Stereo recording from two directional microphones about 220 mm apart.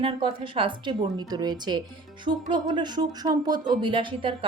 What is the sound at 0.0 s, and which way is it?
A woman's voice, 20° right (ahead or behind).